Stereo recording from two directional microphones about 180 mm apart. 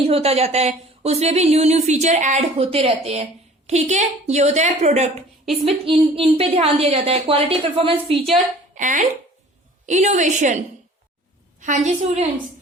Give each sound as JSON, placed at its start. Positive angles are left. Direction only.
{"t": 0.1, "sound": "speech", "side_deg": -35}
{"t": 8.7, "sound": "speech", "side_deg": -45}
{"t": 11.6, "sound": "speech", "side_deg": -40}